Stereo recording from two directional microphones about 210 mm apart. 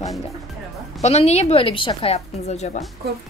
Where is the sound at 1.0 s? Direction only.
30° left (ahead or behind).